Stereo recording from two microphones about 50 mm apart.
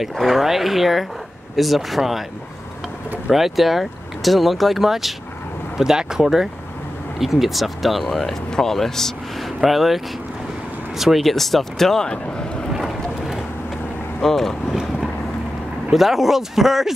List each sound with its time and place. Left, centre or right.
0.1 s speech: centre
3.3 s speech: centre
12.1 s speech: centre
14.2 s speech: centre
15.9 s speech: centre